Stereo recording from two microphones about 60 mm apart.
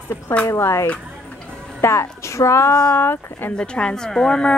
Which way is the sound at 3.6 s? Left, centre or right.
Centre.